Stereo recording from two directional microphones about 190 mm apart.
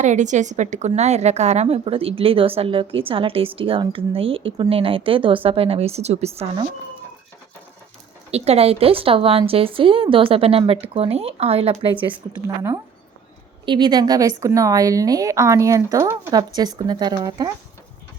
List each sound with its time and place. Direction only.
0.0 s a woman's voice: 40° right (ahead or behind)
8.3 s a woman's voice: 35° right (ahead or behind)
13.7 s a woman's voice: 25° right (ahead or behind)